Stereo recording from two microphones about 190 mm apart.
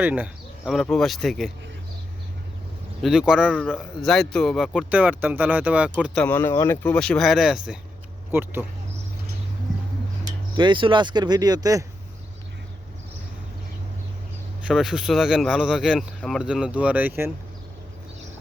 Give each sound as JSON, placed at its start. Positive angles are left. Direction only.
{"t": 0.0, "sound": "a man's voice", "side_deg": -5}
{"t": 3.0, "sound": "a man's voice", "side_deg": -5}
{"t": 6.0, "sound": "a man's voice", "side_deg": 5}
{"t": 10.6, "sound": "speech", "side_deg": -25}
{"t": 14.6, "sound": "a man's voice", "side_deg": -5}